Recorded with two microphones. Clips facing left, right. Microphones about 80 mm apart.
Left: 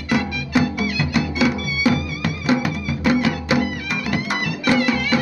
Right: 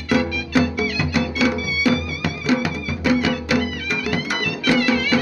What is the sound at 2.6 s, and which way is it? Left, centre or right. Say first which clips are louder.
Music: left 1 dB; centre.